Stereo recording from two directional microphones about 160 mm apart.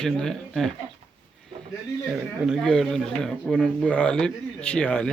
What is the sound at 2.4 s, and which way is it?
Speech, centre (ahead or behind).